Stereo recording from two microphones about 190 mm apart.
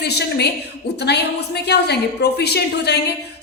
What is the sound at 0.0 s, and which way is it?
A woman's voice, 60° left (ahead or behind).